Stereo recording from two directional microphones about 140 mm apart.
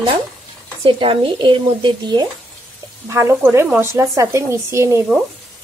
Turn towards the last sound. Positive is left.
turn(degrees=-20)  # may be behind; listen again after turning